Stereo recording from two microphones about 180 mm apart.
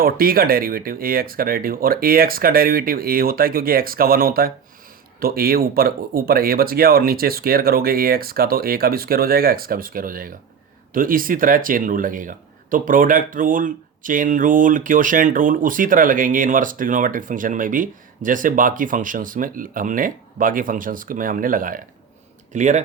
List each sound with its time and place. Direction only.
0.0 s speech: 55° right (ahead or behind)